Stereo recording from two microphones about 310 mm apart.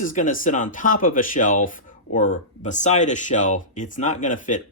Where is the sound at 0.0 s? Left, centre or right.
Left.